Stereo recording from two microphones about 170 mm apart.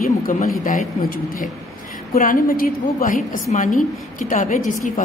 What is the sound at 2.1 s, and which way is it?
A woman's voice, 55° left (ahead or behind).